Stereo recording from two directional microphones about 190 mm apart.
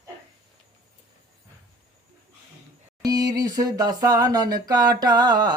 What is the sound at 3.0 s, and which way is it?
Speech, 20° right (ahead or behind).